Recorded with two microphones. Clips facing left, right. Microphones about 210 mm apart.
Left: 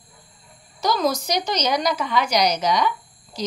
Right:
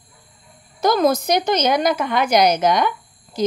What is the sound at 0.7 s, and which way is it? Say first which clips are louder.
A woman's voice: right 5 dB; 55° right (ahead or behind).